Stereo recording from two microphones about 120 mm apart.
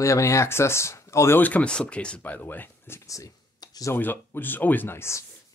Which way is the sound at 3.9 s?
15° left (ahead or behind).